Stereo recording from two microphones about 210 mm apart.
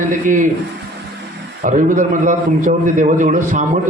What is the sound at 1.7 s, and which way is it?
A man's voice, 40° right (ahead or behind).